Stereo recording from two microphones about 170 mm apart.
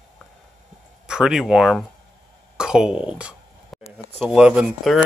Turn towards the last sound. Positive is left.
turn(degrees=-5)  # may be behind; listen again after turning